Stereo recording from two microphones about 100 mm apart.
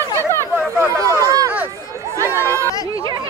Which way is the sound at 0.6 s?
25° right (ahead or behind).